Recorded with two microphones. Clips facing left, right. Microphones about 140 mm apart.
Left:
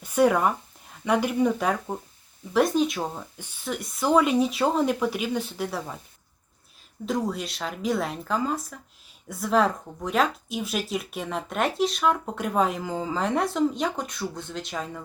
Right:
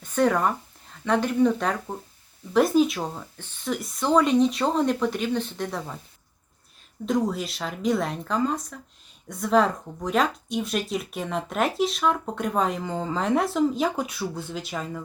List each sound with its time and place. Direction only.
0.0 s speech: 10° left (ahead or behind)
2.5 s speech: centre (ahead or behind)
7.0 s speech: centre (ahead or behind)